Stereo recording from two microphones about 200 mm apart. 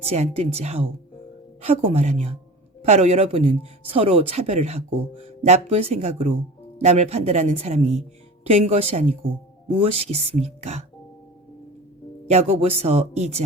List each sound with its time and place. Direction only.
0.0 s speech: 30° right (ahead or behind)
12.3 s speech: 30° right (ahead or behind)